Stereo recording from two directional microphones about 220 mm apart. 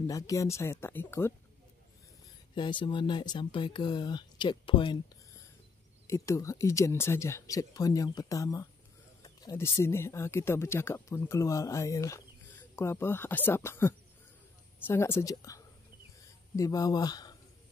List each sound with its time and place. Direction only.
0.0 s speech: 15° left (ahead or behind)
2.5 s speech: 20° left (ahead or behind)